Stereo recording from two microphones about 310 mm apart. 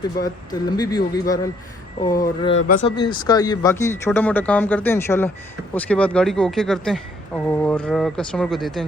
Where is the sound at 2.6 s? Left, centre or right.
Left.